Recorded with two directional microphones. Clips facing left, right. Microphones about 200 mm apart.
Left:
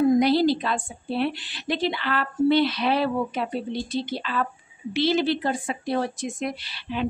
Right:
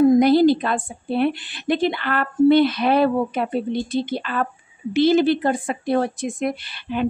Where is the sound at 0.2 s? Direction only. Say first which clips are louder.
Right 5 dB; 50° right (ahead or behind).